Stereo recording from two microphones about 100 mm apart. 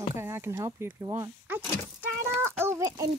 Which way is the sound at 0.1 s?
25° right (ahead or behind).